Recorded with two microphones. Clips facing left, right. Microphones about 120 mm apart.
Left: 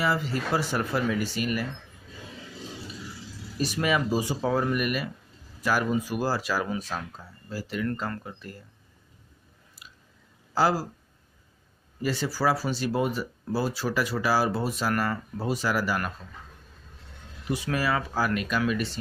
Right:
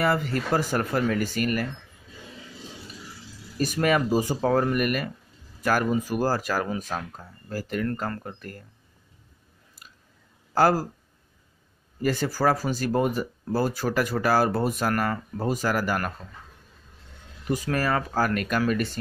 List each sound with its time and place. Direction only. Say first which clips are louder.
0.0 s speech: right 3 dB; 50° right (ahead or behind)
3.5 s speech: right 3 dB; 50° right (ahead or behind)
6.9 s speech: right 2 dB; 15° right (ahead or behind)
7.4 s speech: right 2 dB; 50° right (ahead or behind)
9.8 s chewing: left 1 dB; 45° right (ahead or behind)
10.5 s speech: right 3 dB; 50° right (ahead or behind)
12.0 s speech: right 3 dB; 50° right (ahead or behind)
17.5 s speech: right 2 dB; 45° right (ahead or behind)